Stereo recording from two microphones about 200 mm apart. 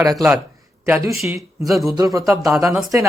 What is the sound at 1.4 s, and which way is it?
Speech, centre (ahead or behind).